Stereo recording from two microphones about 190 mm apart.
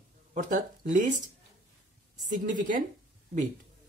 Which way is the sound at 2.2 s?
45° right (ahead or behind).